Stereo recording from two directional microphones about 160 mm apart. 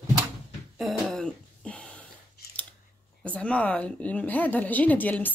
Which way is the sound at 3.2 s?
10° left (ahead or behind).